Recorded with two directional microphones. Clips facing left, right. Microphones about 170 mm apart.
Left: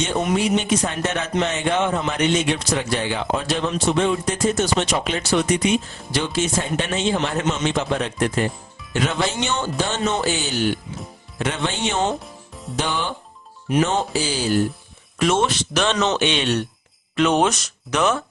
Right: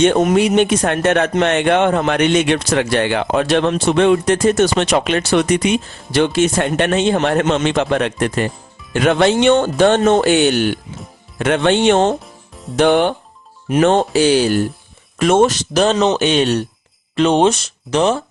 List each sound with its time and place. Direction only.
0.0 s speech: 55° right (ahead or behind)
12.2 s music: centre (ahead or behind)
12.7 s speech: 60° right (ahead or behind)
15.2 s speech: 50° right (ahead or behind)
17.2 s speech: 30° right (ahead or behind)